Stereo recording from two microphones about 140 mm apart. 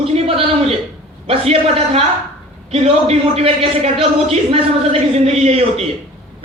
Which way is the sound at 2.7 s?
50° right (ahead or behind).